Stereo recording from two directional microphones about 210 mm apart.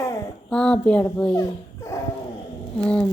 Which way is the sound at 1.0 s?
5° left (ahead or behind).